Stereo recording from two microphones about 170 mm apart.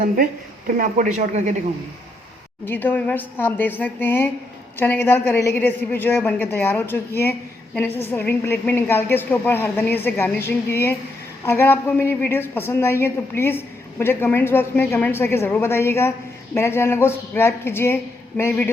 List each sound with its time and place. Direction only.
0.8 s speech: 45° right (ahead or behind)
2.6 s a woman's voice: 10° left (ahead or behind)